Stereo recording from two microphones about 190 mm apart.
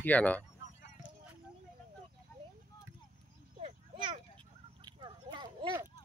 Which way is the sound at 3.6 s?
35° right (ahead or behind).